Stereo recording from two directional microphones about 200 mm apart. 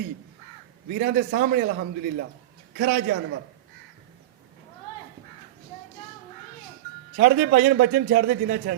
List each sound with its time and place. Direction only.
0.9 s speech: 45° right (ahead or behind)
7.2 s speech: 45° right (ahead or behind)